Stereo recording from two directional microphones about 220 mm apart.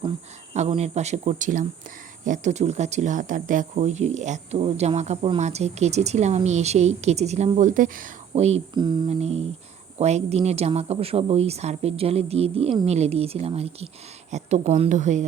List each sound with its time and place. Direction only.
0.5 s speech: 30° right (ahead or behind)